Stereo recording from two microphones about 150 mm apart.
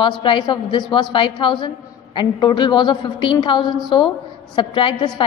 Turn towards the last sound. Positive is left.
turn(degrees=30)  # may be behind; listen again after turning